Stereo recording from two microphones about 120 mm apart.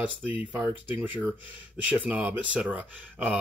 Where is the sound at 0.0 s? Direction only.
15° right (ahead or behind).